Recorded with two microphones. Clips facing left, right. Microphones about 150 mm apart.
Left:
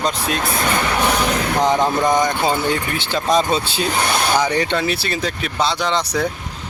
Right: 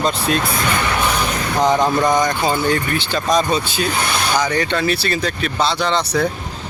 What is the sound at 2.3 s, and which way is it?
Speech, 20° left (ahead or behind).